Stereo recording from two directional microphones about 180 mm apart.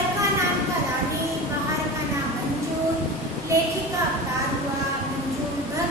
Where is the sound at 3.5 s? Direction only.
15° right (ahead or behind).